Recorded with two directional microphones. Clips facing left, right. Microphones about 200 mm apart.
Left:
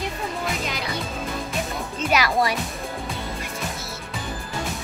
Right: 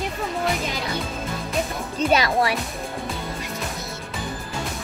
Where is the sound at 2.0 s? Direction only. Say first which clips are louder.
Right 5 dB; 35° right (ahead or behind).